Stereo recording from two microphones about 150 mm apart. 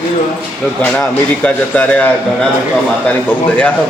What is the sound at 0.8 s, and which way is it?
A man's voice, 10° left (ahead or behind).